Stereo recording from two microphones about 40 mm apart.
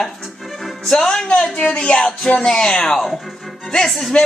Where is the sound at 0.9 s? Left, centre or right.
Centre.